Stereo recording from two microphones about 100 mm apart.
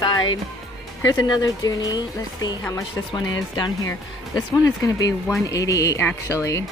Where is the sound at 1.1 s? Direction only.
40° left (ahead or behind).